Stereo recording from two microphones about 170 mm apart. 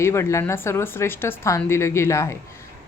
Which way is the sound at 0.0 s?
15° left (ahead or behind).